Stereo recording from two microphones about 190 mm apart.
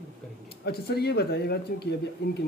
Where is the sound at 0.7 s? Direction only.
60° left (ahead or behind).